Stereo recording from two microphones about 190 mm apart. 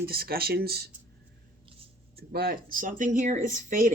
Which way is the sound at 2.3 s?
55° right (ahead or behind).